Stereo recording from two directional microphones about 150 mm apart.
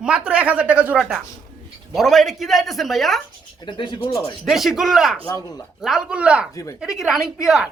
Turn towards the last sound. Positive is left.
turn(degrees=-5)  # may be behind; listen again after turning